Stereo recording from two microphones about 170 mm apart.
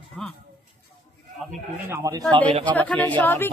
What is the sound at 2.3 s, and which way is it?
Speech, 30° right (ahead or behind).